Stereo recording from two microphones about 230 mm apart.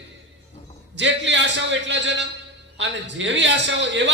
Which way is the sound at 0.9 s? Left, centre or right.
Right.